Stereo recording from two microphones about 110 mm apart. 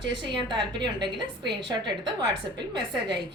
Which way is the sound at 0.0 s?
45° right (ahead or behind).